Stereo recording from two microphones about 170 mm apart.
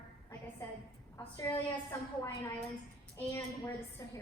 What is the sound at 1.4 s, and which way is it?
A woman's voice, 15° left (ahead or behind).